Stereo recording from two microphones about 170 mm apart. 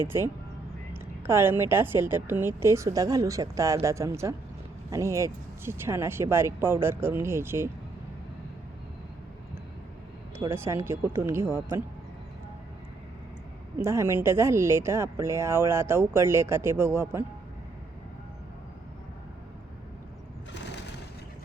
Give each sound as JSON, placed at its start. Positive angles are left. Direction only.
{"t": 1.3, "sound": "speech", "side_deg": -15}
{"t": 10.5, "sound": "speech", "side_deg": -15}
{"t": 13.7, "sound": "speech", "side_deg": -15}